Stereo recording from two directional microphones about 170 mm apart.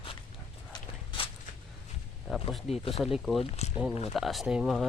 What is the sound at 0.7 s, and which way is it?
Walk, 25° left (ahead or behind).